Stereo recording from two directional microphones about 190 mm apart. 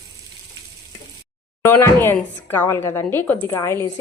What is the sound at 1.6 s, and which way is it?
Dishes, 15° left (ahead or behind).